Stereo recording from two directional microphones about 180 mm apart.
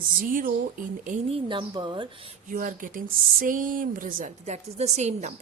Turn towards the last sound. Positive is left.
turn(degrees=-40)  # may be behind; listen again after turning